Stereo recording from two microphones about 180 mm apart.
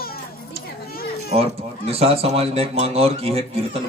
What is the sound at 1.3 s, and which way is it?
Speech, 35° right (ahead or behind).